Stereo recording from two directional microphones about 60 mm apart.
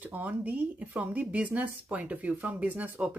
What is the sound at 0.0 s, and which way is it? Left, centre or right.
Speech, right.